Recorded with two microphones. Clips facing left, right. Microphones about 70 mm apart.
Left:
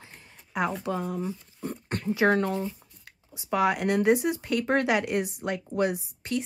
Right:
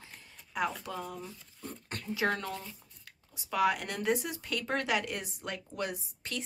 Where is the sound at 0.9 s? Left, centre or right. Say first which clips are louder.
Left 9 dB; left.